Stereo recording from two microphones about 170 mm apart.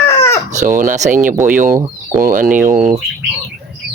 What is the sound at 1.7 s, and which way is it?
Speech, 20° right (ahead or behind).